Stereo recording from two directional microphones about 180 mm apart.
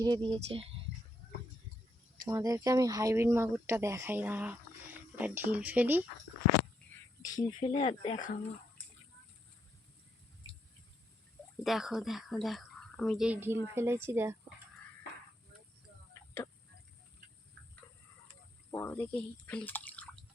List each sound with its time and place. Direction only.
0.0 s speech: 25° right (ahead or behind)
2.2 s speech: 15° right (ahead or behind)
7.2 s speech: 20° left (ahead or behind)
11.6 s speech: centre (ahead or behind)
18.7 s speech: 15° left (ahead or behind)